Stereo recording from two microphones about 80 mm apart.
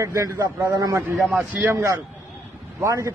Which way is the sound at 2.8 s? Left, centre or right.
Right.